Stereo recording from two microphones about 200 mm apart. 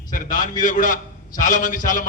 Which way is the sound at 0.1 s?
40° left (ahead or behind).